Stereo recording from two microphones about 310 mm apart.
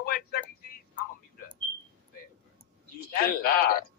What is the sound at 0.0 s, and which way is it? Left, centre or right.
Vehicle, left.